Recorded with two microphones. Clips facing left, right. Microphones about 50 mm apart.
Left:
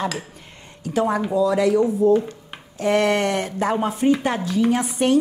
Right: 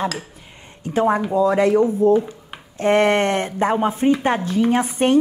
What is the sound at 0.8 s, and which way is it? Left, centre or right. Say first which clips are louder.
A woman's voice: right 3 dB; right.